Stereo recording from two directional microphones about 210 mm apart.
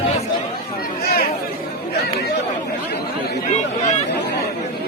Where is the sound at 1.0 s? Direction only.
45° left (ahead or behind).